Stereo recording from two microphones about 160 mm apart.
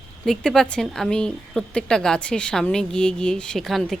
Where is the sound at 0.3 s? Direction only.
5° left (ahead or behind).